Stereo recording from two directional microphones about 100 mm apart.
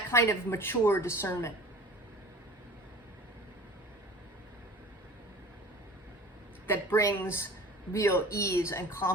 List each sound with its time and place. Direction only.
0.1 s a woman's voice: 25° left (ahead or behind)
6.7 s a woman's voice: 25° left (ahead or behind)